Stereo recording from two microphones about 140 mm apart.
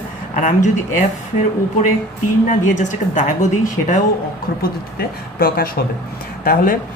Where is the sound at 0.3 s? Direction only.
60° left (ahead or behind).